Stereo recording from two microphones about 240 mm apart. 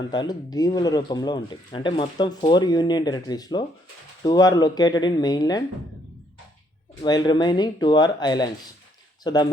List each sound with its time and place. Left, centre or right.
0.1 s speech: centre
7.0 s speech: centre